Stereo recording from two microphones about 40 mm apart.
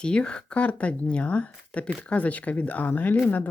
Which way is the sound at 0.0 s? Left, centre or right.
Left.